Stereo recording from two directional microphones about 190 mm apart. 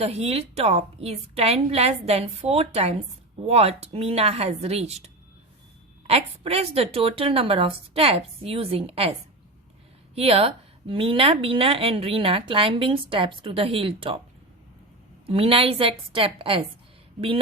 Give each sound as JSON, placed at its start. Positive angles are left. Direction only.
{"t": 0.0, "sound": "a woman's voice", "side_deg": -30}
{"t": 10.2, "sound": "a woman's voice", "side_deg": -30}
{"t": 15.3, "sound": "a woman's voice", "side_deg": -30}